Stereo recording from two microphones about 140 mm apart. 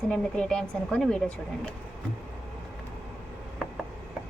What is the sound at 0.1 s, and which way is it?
A woman's voice, 5° left (ahead or behind).